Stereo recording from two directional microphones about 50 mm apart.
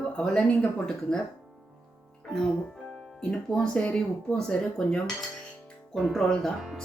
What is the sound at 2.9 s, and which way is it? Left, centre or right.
Speech, centre.